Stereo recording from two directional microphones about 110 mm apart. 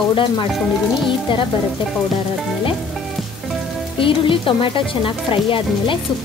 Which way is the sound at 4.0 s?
50° left (ahead or behind).